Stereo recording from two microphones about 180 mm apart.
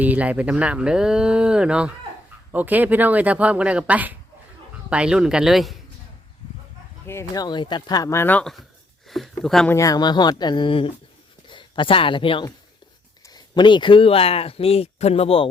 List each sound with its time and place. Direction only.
0.0 s speech: 10° right (ahead or behind)
7.1 s speech: 15° left (ahead or behind); by 9.7 s centre (ahead or behind)
9.7 s speech: 20° left (ahead or behind)